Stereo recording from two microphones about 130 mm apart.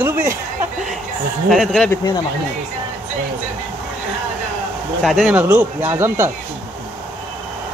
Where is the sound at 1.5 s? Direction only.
Centre (ahead or behind).